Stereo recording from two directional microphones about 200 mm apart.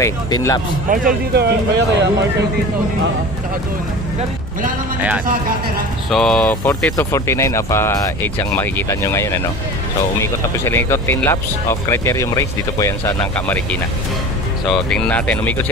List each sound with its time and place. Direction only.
0.0 s speech: 15° left (ahead or behind)
0.8 s speech: 45° right (ahead or behind)
6.0 s speech: centre (ahead or behind)